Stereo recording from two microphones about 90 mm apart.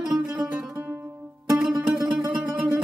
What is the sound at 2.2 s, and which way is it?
Music, 20° right (ahead or behind).